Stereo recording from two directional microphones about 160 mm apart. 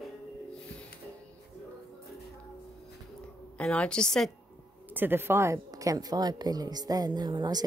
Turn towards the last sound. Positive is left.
turn(degrees=-25)  # may be behind; listen again after turning